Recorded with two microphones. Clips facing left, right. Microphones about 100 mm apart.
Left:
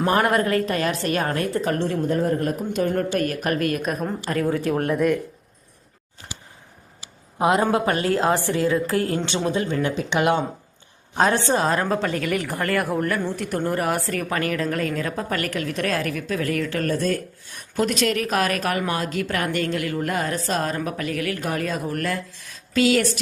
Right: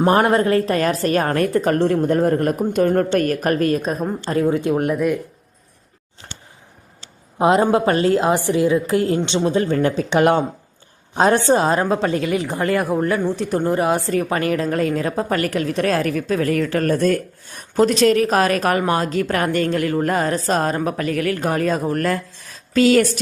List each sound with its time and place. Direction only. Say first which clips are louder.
0.0 s a woman's voice: right 4 dB; 30° right (ahead or behind); by 4.9 s 15° right (ahead or behind)
6.2 s a sound: even; 35° right (ahead or behind)
7.3 s a woman's voice: right 4 dB; 25° right (ahead or behind)
9.5 s speech: right 5 dB; 40° right (ahead or behind)
12.3 s speech: right 4 dB; 20° right (ahead or behind); by 23.2 s 40° right (ahead or behind)